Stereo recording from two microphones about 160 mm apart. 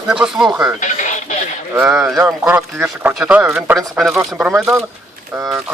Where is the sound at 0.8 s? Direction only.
50° left (ahead or behind).